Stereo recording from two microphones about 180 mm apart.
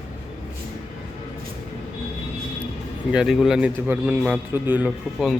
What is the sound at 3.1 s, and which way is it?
A man's voice, 5° right (ahead or behind).